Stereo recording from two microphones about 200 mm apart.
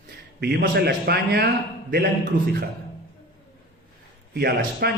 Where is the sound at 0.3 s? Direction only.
55° right (ahead or behind).